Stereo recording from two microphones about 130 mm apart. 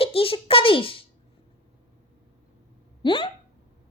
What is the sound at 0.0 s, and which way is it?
A child's voice, 45° left (ahead or behind).